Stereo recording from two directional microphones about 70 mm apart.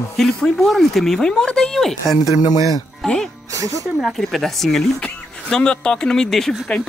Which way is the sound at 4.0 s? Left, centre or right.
Centre.